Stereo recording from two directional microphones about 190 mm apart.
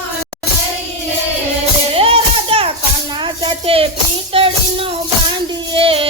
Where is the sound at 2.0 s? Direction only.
30° right (ahead or behind).